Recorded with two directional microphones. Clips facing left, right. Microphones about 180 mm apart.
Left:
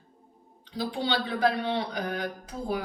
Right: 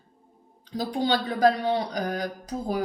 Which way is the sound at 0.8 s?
45° right (ahead or behind).